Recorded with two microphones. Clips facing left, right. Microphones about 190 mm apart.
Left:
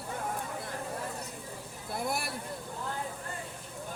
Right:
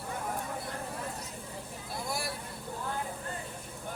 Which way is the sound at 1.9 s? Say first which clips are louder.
Left 3 dB; 60° left (ahead or behind).